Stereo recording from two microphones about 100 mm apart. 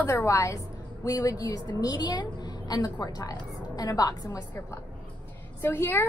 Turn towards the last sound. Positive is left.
turn(degrees=20)  # may be behind; listen again after turning